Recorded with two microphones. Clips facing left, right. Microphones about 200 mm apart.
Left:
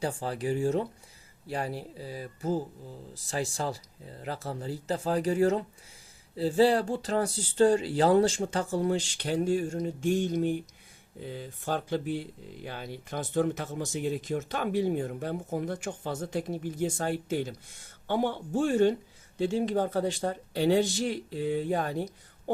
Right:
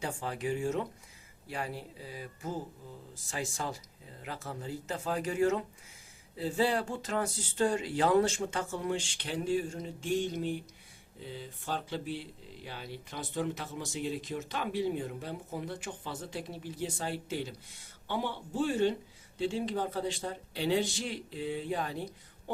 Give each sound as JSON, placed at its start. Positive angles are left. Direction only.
{"t": 0.0, "sound": "speech", "side_deg": 35}